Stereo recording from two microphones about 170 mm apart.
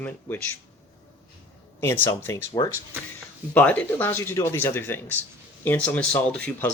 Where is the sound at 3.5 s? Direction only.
10° left (ahead or behind).